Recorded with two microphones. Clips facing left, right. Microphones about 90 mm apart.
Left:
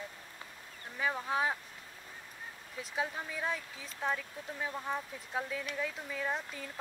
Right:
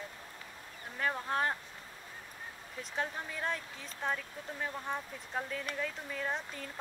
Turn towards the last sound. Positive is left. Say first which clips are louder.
# left 1 dB
turn(degrees=0)  # may be behind; listen again after turning